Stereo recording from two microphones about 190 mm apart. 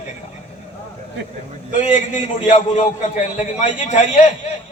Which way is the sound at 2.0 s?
40° left (ahead or behind).